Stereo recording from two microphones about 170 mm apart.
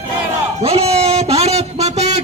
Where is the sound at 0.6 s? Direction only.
35° right (ahead or behind).